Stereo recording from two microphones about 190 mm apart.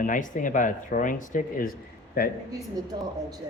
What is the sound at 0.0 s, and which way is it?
Speech, 45° left (ahead or behind).